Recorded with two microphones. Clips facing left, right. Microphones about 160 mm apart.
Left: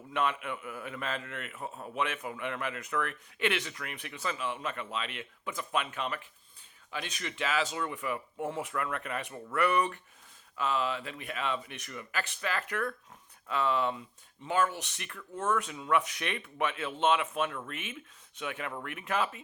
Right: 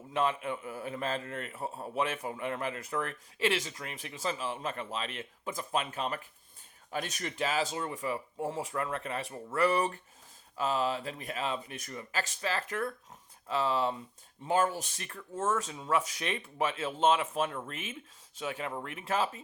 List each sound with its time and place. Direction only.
0.1 s a man's voice: 30° right (ahead or behind)